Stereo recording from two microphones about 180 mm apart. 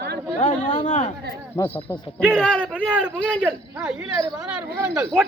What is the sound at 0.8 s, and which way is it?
Speech, 45° left (ahead or behind).